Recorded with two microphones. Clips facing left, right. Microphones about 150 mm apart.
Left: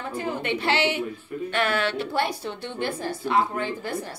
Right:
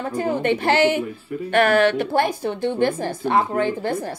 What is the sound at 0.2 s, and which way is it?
A woman's voice, 45° right (ahead or behind).